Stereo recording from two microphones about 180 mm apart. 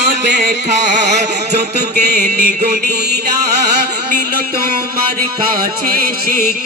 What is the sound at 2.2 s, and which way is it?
Music, 65° right (ahead or behind).